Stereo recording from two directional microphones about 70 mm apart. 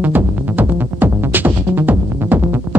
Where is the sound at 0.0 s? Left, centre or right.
Right.